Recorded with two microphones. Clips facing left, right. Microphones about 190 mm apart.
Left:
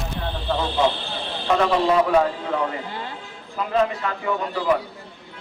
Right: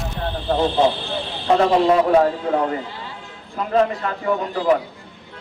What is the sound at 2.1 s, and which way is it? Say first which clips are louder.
Speech: right 4 dB; 35° right (ahead or behind).